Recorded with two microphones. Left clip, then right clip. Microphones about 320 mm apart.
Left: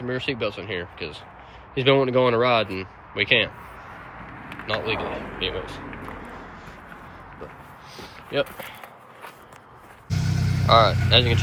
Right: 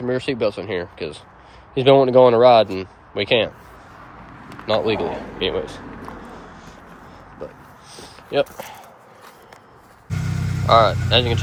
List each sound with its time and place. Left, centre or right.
0.1 s speech: centre
4.6 s speech: centre
7.9 s a sound: centre
10.1 s vehicle: centre